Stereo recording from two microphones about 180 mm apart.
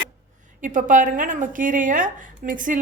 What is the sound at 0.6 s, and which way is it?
A woman's voice, 45° right (ahead or behind).